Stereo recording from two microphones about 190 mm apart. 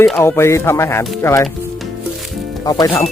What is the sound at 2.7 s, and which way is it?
Speech, 20° left (ahead or behind).